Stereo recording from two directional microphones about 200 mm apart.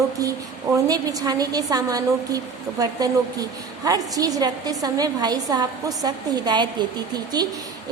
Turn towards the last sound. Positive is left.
turn(degrees=-20)  # may be behind; listen again after turning